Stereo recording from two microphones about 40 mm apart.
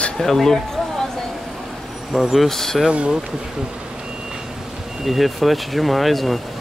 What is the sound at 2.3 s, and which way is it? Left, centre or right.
Speech, centre.